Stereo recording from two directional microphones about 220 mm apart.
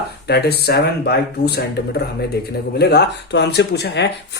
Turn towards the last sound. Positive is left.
turn(degrees=50)  # may be behind; listen again after turning